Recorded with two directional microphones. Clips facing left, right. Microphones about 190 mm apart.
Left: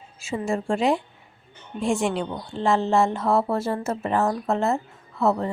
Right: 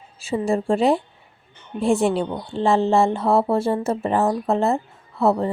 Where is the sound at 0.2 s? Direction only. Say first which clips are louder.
Right 5 dB; 35° right (ahead or behind).